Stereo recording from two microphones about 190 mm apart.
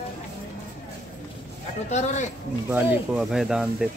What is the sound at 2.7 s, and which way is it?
Speech, 5° right (ahead or behind).